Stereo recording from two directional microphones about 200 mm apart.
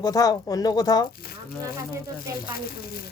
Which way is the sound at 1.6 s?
15° right (ahead or behind).